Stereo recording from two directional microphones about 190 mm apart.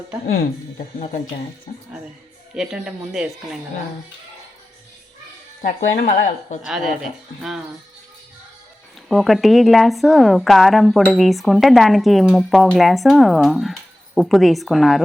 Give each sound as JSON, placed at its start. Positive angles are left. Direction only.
{"t": 1.7, "sound": "speech", "side_deg": 45}
{"t": 2.6, "sound": "speech", "side_deg": -5}
{"t": 5.6, "sound": "speech", "side_deg": 45}
{"t": 6.7, "sound": "speech", "side_deg": 0}
{"t": 9.0, "sound": "speech", "side_deg": 0}